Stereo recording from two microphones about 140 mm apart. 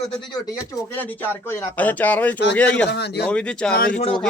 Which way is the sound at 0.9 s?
15° left (ahead or behind).